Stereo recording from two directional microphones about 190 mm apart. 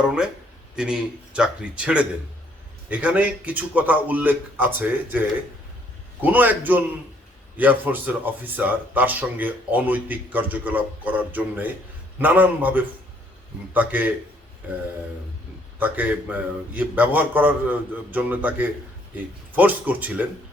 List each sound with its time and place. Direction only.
0.8 s a man's voice: 5° right (ahead or behind)
6.2 s speech: 10° right (ahead or behind)
15.8 s speech: 10° right (ahead or behind)